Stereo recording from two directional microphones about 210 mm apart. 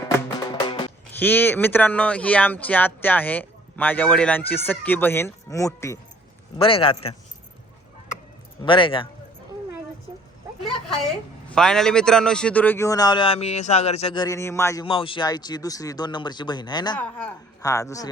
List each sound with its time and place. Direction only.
0.3 s music: 20° left (ahead or behind)
1.2 s speech: 10° left (ahead or behind)
6.6 s speech: 25° left (ahead or behind)
8.6 s speech: 25° left (ahead or behind)
11.4 s speech: 5° left (ahead or behind)
14.8 s speech: 25° left (ahead or behind)
17.0 s speech: 5° left (ahead or behind)